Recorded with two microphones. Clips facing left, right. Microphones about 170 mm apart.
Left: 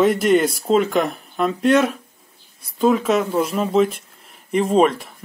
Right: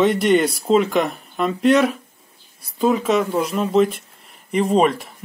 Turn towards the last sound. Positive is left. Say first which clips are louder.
# left 1 dB
turn(degrees=0)  # may be behind; listen again after turning